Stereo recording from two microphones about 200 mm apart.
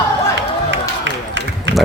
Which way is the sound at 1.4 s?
65° right (ahead or behind).